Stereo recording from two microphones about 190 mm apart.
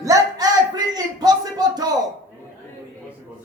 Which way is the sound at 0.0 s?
20° right (ahead or behind).